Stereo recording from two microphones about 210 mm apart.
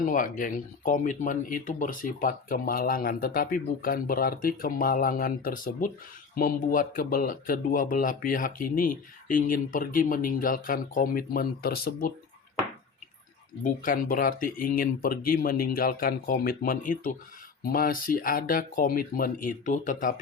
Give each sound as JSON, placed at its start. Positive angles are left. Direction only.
{"t": 0.0, "sound": "speech", "side_deg": 40}
{"t": 13.6, "sound": "speech", "side_deg": 40}